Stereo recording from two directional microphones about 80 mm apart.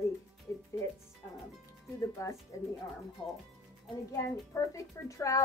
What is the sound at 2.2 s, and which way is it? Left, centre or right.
Speech, left.